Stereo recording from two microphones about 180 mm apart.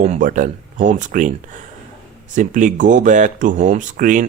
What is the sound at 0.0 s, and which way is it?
Speech, 45° right (ahead or behind).